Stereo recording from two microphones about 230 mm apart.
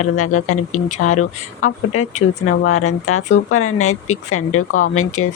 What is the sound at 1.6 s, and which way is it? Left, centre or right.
Speech, left.